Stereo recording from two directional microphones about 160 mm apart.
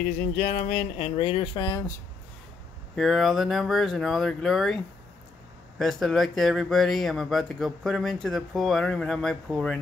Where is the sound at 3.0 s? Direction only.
Centre (ahead or behind).